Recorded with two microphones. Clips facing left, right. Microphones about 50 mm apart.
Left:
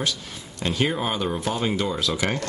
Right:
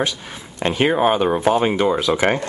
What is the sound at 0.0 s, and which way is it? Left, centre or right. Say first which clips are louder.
Speech: right 5 dB; right.